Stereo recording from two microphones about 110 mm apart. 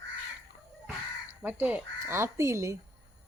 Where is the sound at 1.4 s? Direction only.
15° right (ahead or behind).